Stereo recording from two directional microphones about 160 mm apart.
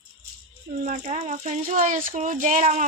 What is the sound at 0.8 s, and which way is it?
Speech, 50° right (ahead or behind).